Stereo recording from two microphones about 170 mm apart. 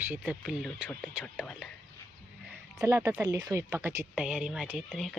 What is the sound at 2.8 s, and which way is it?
Speech, 15° right (ahead or behind).